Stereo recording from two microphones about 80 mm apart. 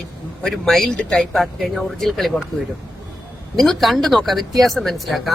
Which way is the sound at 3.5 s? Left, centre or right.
Centre.